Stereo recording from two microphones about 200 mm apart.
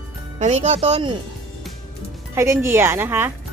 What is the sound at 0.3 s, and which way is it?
Speech, 35° right (ahead or behind).